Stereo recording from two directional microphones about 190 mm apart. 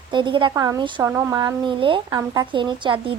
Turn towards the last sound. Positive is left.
turn(degrees=-25)  # may be behind; listen again after turning